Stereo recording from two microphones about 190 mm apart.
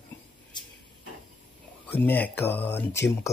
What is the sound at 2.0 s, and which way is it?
Speech, 10° left (ahead or behind).